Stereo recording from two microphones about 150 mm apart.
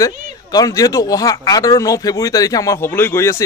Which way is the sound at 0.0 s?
25° left (ahead or behind).